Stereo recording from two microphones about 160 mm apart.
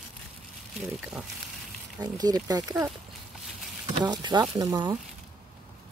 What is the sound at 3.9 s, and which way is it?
Speech, 25° right (ahead or behind).